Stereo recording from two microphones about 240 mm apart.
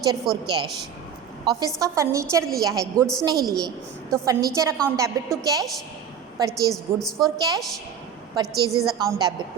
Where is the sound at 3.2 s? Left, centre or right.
Centre.